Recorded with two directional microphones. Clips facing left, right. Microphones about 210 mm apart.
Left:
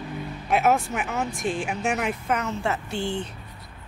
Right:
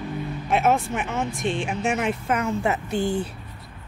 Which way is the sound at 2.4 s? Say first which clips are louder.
Right 3 dB; 15° right (ahead or behind).